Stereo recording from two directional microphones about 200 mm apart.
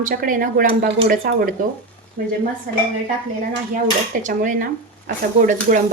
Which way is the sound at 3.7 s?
40° right (ahead or behind).